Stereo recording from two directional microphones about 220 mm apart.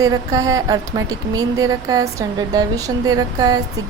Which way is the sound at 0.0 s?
15° right (ahead or behind).